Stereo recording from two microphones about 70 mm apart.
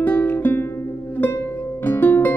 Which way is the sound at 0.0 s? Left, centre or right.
Left.